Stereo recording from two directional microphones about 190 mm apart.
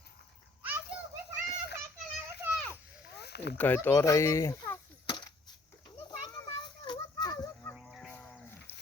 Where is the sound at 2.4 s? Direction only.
10° right (ahead or behind).